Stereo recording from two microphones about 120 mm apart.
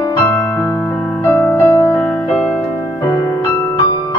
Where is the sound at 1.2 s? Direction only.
20° left (ahead or behind).